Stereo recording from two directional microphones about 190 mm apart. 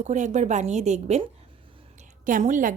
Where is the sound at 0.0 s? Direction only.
40° right (ahead or behind).